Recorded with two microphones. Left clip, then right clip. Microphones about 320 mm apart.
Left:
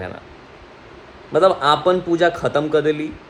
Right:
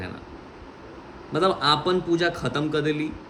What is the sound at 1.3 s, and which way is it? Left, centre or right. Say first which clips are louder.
Speech: left 7 dB; centre.